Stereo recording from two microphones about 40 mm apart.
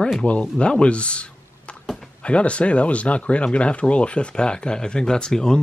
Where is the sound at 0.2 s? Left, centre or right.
Left.